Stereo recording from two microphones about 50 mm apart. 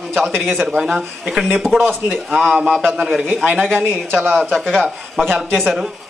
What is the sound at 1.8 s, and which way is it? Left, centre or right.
Speech, right.